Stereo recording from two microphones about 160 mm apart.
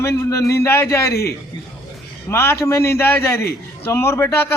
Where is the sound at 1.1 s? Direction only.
80° left.